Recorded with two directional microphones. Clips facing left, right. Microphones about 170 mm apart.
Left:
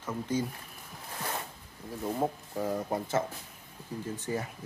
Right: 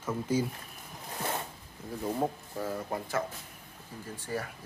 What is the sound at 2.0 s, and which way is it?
Speech, 5° left (ahead or behind).